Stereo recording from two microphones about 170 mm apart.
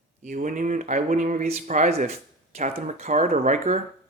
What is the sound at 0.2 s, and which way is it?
Speech, 50° right (ahead or behind).